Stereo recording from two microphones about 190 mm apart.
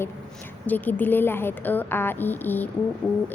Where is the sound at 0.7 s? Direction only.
10° left (ahead or behind).